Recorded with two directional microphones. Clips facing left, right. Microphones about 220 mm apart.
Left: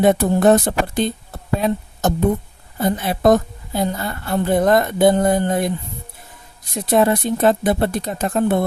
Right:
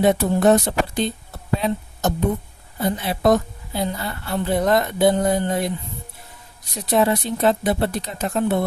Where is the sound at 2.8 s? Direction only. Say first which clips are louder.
Left 3 dB; 50° left (ahead or behind).